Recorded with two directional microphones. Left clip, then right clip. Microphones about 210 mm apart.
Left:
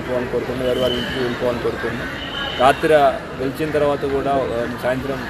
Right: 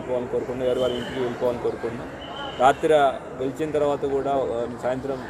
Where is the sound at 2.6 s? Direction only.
25° right (ahead or behind).